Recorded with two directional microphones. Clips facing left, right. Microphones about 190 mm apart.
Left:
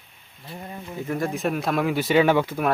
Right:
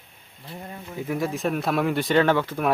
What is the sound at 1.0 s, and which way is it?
Speech, 5° right (ahead or behind).